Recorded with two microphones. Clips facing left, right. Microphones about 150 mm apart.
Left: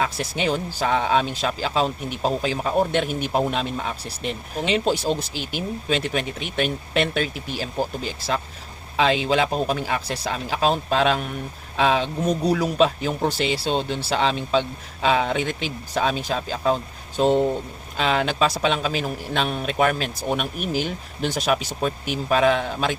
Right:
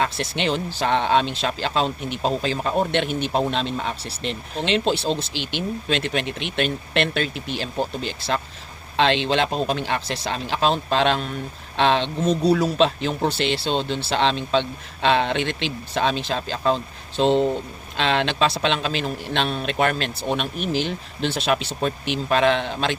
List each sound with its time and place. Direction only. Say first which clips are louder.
0.0 s speech: even; 5° left (ahead or behind)